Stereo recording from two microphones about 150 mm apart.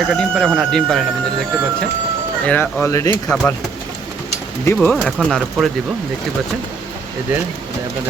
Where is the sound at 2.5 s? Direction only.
10° left (ahead or behind).